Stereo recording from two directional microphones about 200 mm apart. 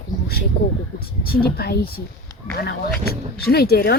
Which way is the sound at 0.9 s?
50° left (ahead or behind).